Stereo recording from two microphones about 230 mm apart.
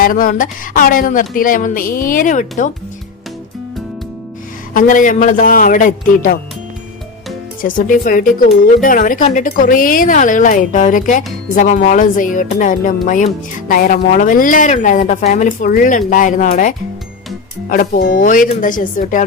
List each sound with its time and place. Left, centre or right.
0.0 s speech: left
4.7 s speech: left
7.6 s speech: left